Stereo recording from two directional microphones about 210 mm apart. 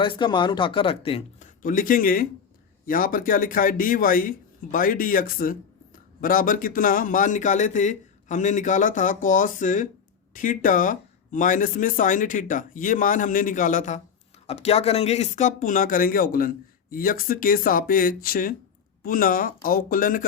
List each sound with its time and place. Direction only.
0.0 s speech: 25° left (ahead or behind)
1.6 s a man's voice: 40° left (ahead or behind)